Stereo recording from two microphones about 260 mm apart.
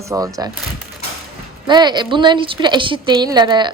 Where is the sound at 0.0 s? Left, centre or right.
Centre.